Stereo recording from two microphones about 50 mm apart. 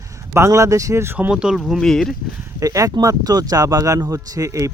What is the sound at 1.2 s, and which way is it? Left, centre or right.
Speech, right.